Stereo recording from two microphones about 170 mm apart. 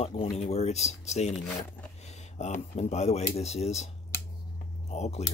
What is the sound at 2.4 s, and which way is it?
Speech, 40° left (ahead or behind).